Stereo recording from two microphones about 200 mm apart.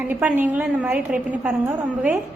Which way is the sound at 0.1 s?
10° right (ahead or behind).